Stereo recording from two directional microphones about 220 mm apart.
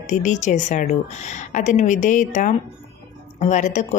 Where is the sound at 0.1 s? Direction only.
35° left (ahead or behind).